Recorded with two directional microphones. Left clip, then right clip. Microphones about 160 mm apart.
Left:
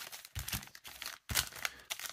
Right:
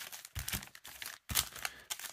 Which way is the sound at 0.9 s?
5° left (ahead or behind).